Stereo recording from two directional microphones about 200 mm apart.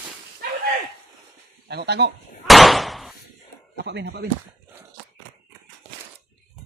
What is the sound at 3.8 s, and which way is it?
Speech, 55° right (ahead or behind).